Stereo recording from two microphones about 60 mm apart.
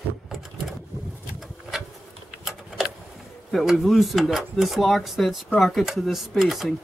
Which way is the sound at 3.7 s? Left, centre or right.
Centre.